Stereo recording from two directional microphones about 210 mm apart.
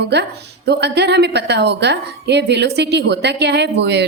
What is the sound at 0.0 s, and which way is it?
Speech, 55° right (ahead or behind).